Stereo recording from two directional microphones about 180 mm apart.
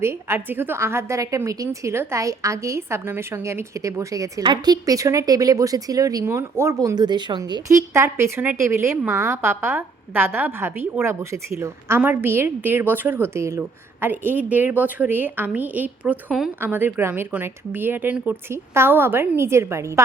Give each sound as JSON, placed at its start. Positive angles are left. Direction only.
{"t": 0.0, "sound": "a woman's voice", "side_deg": -15}